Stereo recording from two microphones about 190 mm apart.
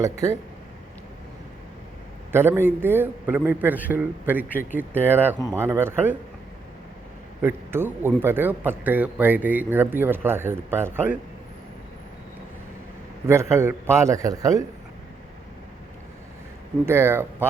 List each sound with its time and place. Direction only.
0.0 s speech: 15° right (ahead or behind)
2.3 s speech: 10° right (ahead or behind)
7.4 s speech: 10° right (ahead or behind)
13.2 s speech: 15° right (ahead or behind)
16.8 s speech: 15° right (ahead or behind)